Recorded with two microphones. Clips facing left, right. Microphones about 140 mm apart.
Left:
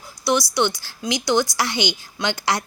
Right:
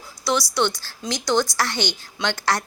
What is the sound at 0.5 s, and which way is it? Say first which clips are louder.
Speech: left 1 dB; 15° left (ahead or behind).